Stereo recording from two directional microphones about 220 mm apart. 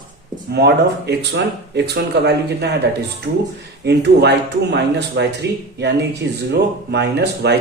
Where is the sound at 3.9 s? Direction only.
50° right (ahead or behind).